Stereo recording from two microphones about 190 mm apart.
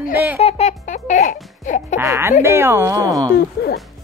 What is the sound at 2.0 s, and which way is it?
Speech, 15° right (ahead or behind).